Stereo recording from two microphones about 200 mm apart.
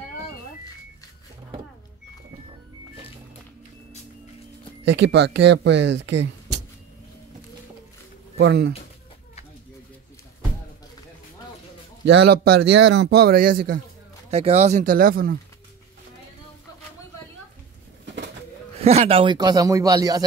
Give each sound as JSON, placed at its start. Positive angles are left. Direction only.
{"t": 4.8, "sound": "speech", "side_deg": -60}
{"t": 8.4, "sound": "speech", "side_deg": -55}
{"t": 12.1, "sound": "a man's voice", "side_deg": -55}
{"t": 14.3, "sound": "speech", "side_deg": -30}
{"t": 18.8, "sound": "a man's voice", "side_deg": -30}